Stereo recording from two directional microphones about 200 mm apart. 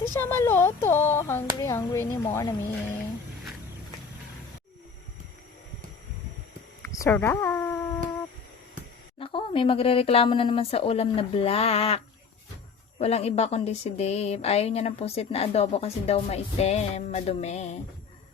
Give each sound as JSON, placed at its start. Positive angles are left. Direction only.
{"t": 0.1, "sound": "speech", "side_deg": 10}
{"t": 6.8, "sound": "speech", "side_deg": 10}
{"t": 9.1, "sound": "a woman's voice", "side_deg": 25}